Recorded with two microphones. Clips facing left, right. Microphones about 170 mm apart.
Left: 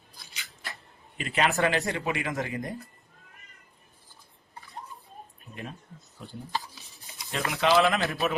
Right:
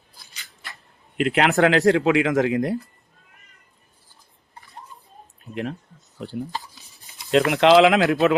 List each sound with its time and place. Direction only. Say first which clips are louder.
1.1 s speech: right 7 dB; 75° right (ahead or behind); by 2.7 s 90° right
6.2 s speech: right 11 dB; 90° right
7.3 s speech: right 10 dB; 80° right